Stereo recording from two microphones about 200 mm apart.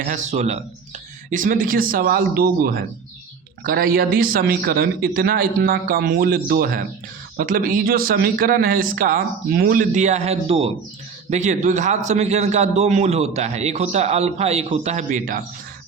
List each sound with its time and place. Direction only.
0.0 s a man's voice: 35° right (ahead or behind)